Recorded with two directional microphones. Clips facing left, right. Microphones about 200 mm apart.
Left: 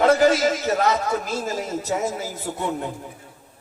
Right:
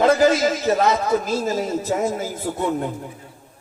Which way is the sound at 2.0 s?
50° right (ahead or behind).